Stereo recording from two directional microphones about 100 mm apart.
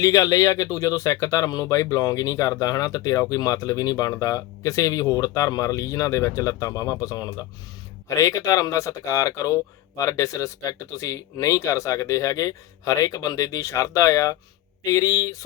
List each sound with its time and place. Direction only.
0.0 s speech: 35° left (ahead or behind)